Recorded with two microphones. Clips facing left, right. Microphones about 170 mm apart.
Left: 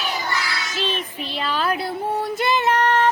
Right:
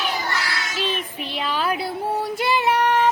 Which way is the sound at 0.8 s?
10° right (ahead or behind).